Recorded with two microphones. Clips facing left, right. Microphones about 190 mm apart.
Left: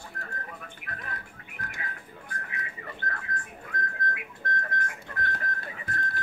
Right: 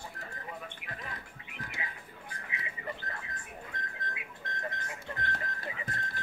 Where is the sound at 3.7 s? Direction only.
25° right (ahead or behind).